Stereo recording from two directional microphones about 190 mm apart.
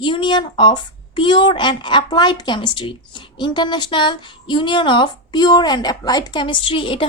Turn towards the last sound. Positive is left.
turn(degrees=25)  # may be behind; listen again after turning